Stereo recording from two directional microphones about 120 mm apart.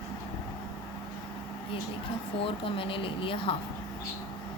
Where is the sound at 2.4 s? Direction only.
50° left (ahead or behind).